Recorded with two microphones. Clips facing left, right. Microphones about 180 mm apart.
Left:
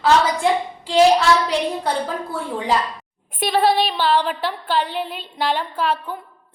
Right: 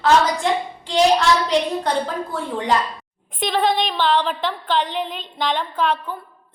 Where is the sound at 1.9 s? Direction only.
5° left (ahead or behind).